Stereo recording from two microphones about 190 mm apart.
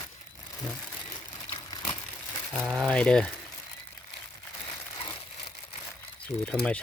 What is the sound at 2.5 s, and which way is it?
Speech, centre (ahead or behind).